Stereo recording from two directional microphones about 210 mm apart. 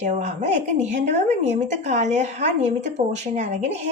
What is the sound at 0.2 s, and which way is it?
A woman's voice, 35° right (ahead or behind).